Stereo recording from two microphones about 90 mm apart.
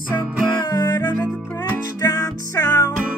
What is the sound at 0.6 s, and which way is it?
Music, 50° left (ahead or behind).